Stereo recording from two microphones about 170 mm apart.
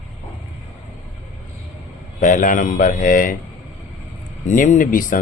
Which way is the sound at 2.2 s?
50° left (ahead or behind).